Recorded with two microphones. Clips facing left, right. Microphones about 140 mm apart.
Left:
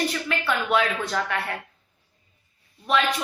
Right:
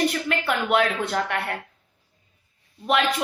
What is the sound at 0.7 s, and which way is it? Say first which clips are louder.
Speech: right 2 dB; 60° right (ahead or behind).